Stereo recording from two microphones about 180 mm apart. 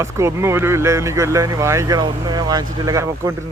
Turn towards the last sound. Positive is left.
turn(degrees=-15)  # may be behind; listen again after turning